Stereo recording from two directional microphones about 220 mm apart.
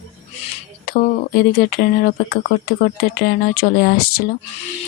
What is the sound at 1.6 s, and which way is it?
Speech, 40° left (ahead or behind).